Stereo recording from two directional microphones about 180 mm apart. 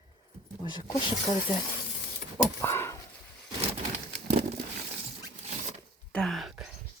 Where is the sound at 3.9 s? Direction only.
45° right (ahead or behind).